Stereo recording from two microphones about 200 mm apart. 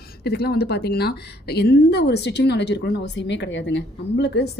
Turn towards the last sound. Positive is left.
turn(degrees=60)  # may be behind; listen again after turning